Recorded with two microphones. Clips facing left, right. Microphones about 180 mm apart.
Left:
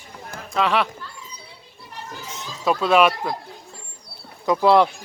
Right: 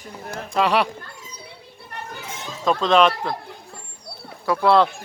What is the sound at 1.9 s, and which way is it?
Children playing, 55° right (ahead or behind).